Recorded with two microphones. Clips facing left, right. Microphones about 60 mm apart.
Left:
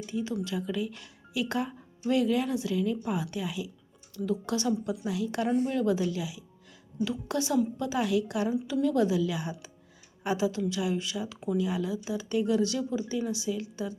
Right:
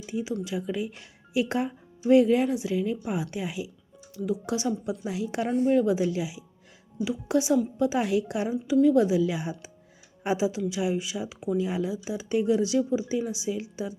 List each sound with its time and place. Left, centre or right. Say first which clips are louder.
0.0 s speech: right 1 dB; centre